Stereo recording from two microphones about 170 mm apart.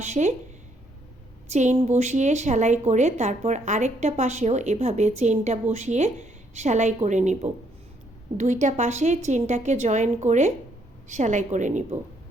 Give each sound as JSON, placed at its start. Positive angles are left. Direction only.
{"t": 0.0, "sound": "a woman's voice", "side_deg": -45}
{"t": 1.5, "sound": "a woman's voice", "side_deg": -45}